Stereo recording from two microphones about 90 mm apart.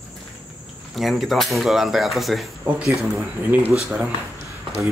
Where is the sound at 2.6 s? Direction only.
15° right (ahead or behind).